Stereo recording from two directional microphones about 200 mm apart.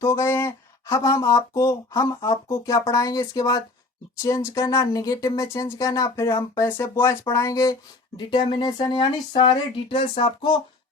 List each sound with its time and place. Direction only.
0.0 s speech: 15° left (ahead or behind)